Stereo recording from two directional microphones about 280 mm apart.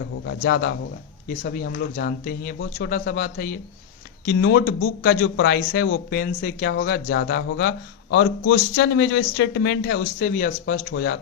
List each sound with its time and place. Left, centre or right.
0.3 s speech: left